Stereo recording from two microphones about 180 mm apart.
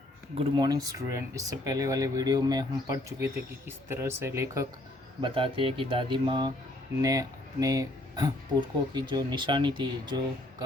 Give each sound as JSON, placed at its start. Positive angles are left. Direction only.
{"t": 0.3, "sound": "speech", "side_deg": -25}
{"t": 5.2, "sound": "speech", "side_deg": -30}